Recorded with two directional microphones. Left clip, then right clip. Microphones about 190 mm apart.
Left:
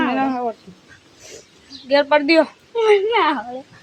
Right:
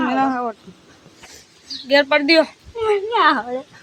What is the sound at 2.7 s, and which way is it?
Speech, 30° left (ahead or behind).